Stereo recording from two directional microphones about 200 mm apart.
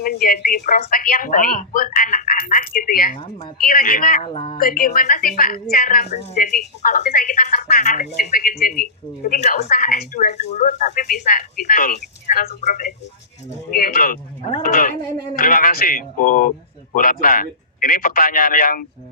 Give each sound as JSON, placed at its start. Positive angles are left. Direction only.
{"t": 0.0, "sound": "speech", "side_deg": 45}
{"t": 3.2, "sound": "speech", "side_deg": 25}
{"t": 3.6, "sound": "speech", "side_deg": 45}
{"t": 4.3, "sound": "speech", "side_deg": 25}
{"t": 4.6, "sound": "speech", "side_deg": 45}